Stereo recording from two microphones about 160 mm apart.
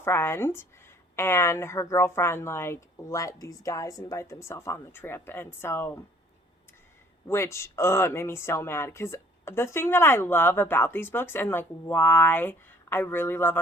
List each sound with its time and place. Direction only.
0.0 s speech: 15° left (ahead or behind)
7.3 s speech: 15° left (ahead or behind)